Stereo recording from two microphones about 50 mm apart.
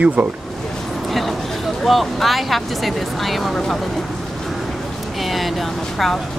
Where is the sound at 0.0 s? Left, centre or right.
Right.